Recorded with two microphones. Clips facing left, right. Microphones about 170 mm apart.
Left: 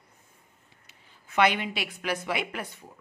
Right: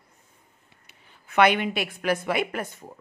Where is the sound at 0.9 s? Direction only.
60° right (ahead or behind).